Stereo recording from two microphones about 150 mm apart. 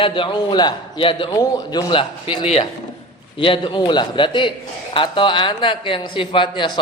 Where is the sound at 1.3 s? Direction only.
25° left (ahead or behind).